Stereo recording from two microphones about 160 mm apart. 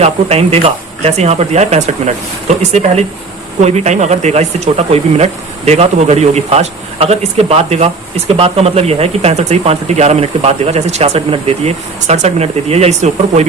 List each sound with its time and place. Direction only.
0.0 s speech: 40° right (ahead or behind)